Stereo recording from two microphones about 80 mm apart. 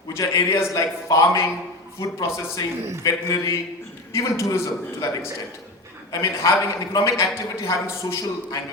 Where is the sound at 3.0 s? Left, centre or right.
Left.